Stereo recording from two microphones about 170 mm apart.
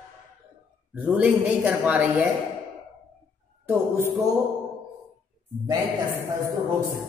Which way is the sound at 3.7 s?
15° right (ahead or behind).